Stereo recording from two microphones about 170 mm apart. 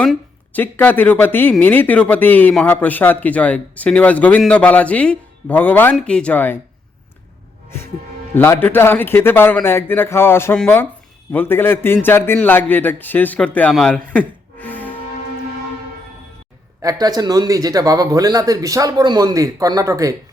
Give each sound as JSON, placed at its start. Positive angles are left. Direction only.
{"t": 0.0, "sound": "speech", "side_deg": 5}
{"t": 8.4, "sound": "speech", "side_deg": 10}
{"t": 16.8, "sound": "speech", "side_deg": -25}